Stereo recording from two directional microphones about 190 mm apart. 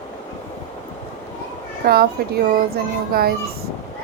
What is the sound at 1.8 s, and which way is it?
Child singing, 55° right (ahead or behind).